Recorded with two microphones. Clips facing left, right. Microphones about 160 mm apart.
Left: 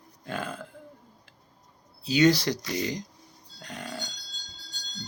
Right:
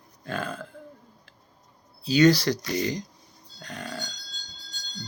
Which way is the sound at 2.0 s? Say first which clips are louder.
Right 2 dB; 20° left (ahead or behind).